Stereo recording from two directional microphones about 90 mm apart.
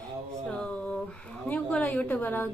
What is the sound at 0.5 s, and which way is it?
Speech, 15° left (ahead or behind).